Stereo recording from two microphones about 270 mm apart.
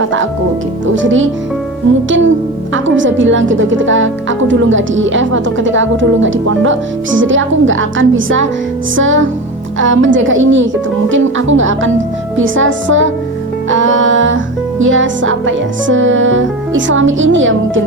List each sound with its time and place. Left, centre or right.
0.9 s speech: right